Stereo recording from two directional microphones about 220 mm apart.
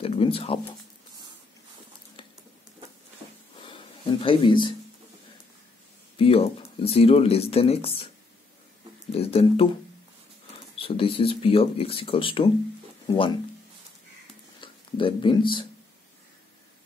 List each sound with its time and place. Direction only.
0.0 s speech: 25° left (ahead or behind)
3.6 s speech: 25° left (ahead or behind)
6.1 s speech: 25° left (ahead or behind)
9.1 s speech: 25° left (ahead or behind)
10.8 s speech: 25° left (ahead or behind)
14.6 s speech: 25° left (ahead or behind)